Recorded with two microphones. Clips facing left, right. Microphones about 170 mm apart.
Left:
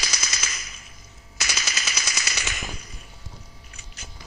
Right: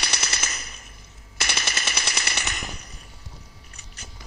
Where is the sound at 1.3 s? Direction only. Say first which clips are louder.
Right 2 dB; 55° right (ahead or behind).